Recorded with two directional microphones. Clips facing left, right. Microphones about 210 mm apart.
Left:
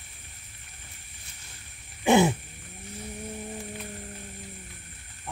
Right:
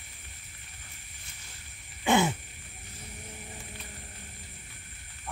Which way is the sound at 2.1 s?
20° left (ahead or behind).